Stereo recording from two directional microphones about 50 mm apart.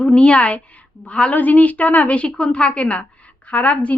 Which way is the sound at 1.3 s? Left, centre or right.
Left.